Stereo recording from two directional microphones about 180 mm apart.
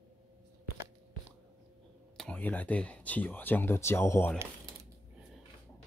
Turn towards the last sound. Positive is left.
turn(degrees=15)  # may be behind; listen again after turning